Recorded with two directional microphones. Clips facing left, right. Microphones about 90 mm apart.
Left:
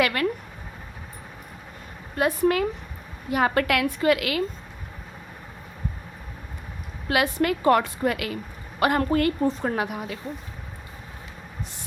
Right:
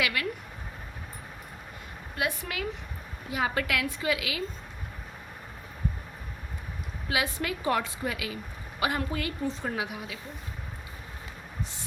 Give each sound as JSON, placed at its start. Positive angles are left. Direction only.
{"t": 0.0, "sound": "a woman's voice", "side_deg": 45}
{"t": 2.1, "sound": "a woman's voice", "side_deg": 45}
{"t": 3.2, "sound": "a woman's voice", "side_deg": 55}
{"t": 7.1, "sound": "a woman's voice", "side_deg": 60}